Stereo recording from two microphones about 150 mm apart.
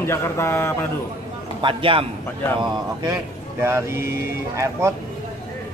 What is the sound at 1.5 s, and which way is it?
Speech, 35° right (ahead or behind).